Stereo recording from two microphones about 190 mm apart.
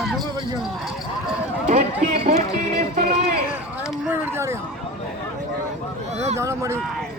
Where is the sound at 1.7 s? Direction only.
40° right (ahead or behind).